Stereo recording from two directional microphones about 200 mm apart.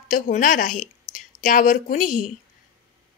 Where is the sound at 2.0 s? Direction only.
90° left.